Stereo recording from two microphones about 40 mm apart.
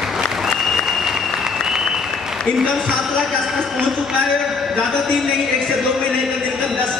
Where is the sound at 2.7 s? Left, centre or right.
Centre.